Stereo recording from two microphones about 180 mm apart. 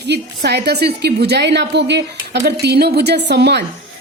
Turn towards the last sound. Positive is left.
turn(degrees=-70)  # may be behind; listen again after turning